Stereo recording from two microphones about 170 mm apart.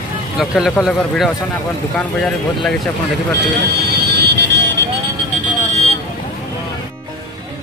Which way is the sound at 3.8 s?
75° right (ahead or behind).